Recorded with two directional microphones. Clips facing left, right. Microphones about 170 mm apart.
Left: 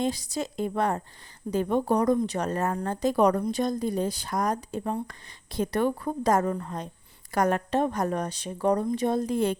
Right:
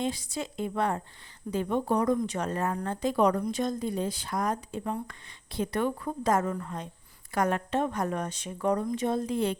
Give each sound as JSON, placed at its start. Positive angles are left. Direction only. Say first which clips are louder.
{"t": 0.0, "sound": "a woman's voice", "louder": "left 3 dB", "side_deg": 40}